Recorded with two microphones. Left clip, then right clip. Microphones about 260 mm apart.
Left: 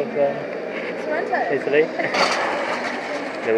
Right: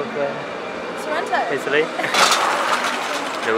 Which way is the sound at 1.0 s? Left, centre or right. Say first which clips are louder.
Right 2 dB; centre.